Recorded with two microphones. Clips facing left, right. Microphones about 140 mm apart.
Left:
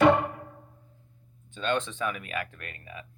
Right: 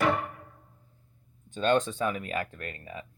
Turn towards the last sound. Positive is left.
turn(degrees=-30)  # may be behind; listen again after turning